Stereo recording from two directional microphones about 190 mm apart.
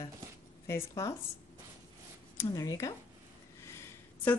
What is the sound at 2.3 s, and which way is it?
Speech, 20° left (ahead or behind).